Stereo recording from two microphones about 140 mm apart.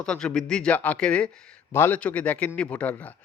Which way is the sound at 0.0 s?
5° left (ahead or behind).